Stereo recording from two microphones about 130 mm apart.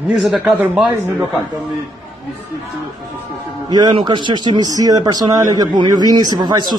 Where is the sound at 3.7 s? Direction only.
35° right (ahead or behind).